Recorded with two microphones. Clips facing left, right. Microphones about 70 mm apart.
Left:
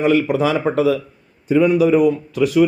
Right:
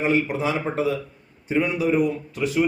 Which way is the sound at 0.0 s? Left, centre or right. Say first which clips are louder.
Left 6 dB; left.